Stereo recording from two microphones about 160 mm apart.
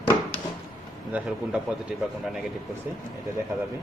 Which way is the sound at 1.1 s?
5° right (ahead or behind).